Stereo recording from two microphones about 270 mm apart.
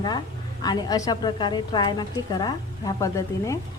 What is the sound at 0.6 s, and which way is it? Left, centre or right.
A woman's voice, centre.